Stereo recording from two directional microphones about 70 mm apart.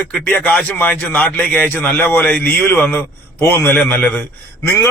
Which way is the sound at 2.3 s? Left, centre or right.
Centre.